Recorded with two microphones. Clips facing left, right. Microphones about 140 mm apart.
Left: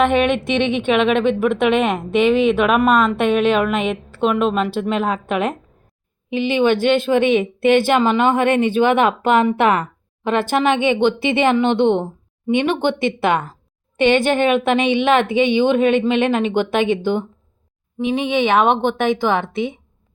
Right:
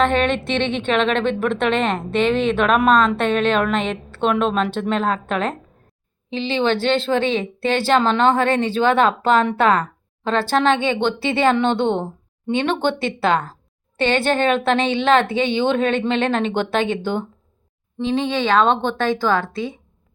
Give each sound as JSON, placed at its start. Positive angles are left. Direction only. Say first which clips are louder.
{"t": 0.0, "sound": "a woman's voice", "louder": "left 2 dB", "side_deg": 15}